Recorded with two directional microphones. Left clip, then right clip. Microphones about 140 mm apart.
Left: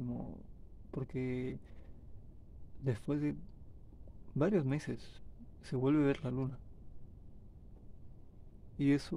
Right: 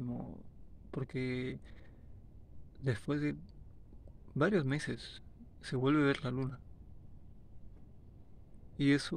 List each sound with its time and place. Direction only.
0.0 s stomach rumble: 10° left (ahead or behind)
0.9 s speech: 20° left (ahead or behind)
2.8 s speech: 20° left (ahead or behind)
4.4 s speech: 20° left (ahead or behind)
8.7 s speech: 15° left (ahead or behind)